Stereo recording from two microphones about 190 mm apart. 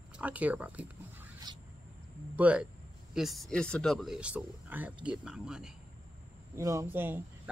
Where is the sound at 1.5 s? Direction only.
20° right (ahead or behind).